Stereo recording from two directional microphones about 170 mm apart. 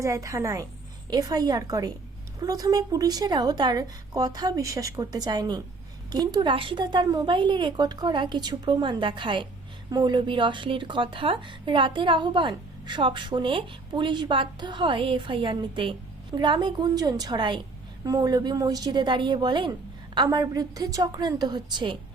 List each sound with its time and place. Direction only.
0.0 s speech: 20° right (ahead or behind)